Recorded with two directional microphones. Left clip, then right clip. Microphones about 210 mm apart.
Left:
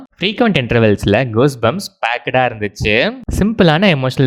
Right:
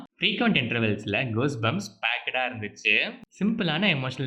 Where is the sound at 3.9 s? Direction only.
45° left (ahead or behind).